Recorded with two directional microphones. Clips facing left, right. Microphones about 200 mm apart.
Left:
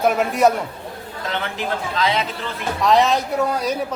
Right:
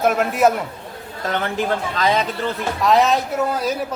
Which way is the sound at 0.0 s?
Centre (ahead or behind).